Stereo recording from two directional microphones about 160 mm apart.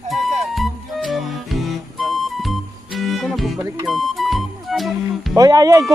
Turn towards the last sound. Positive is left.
turn(degrees=-20)  # may be behind; listen again after turning